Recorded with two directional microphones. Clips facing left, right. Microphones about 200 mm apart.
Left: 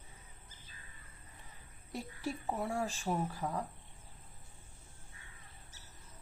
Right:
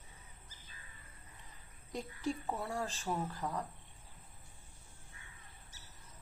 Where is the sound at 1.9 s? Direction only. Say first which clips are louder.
Right 1 dB; 5° left (ahead or behind).